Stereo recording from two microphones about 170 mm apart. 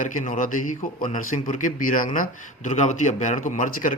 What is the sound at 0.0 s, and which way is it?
A man's voice, 50° left (ahead or behind).